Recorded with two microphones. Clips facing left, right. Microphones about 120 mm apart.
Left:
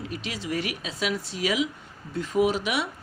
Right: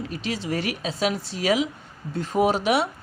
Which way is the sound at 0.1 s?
30° right (ahead or behind).